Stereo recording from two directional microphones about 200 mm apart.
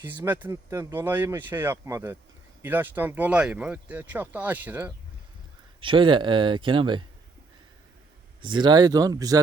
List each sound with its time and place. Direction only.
0.3 s speech: 10° right (ahead or behind)
5.8 s speech: 25° right (ahead or behind)
8.4 s speech: 25° right (ahead or behind)